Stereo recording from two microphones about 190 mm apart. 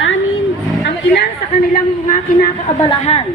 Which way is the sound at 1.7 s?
45° left (ahead or behind).